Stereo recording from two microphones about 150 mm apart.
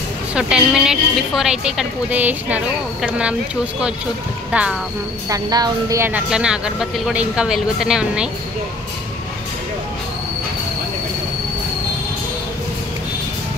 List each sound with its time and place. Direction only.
0.3 s a woman's voice: 5° right (ahead or behind)
4.5 s speech: 5° right (ahead or behind)
5.3 s a woman's voice: 25° right (ahead or behind)
6.3 s a woman's voice: 5° right (ahead or behind)